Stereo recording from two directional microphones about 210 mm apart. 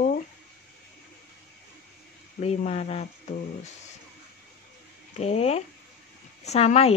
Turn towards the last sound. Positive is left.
turn(degrees=30)  # may be behind; listen again after turning